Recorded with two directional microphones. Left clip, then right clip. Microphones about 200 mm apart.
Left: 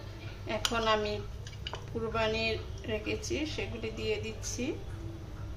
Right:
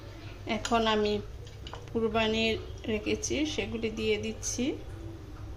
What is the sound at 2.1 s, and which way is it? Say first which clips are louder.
A woman's voice: right 1 dB; 40° right (ahead or behind).